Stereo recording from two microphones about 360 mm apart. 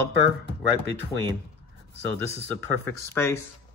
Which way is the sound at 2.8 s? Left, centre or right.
Centre.